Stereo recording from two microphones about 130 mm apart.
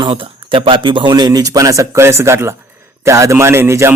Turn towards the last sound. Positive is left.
turn(degrees=-20)  # may be behind; listen again after turning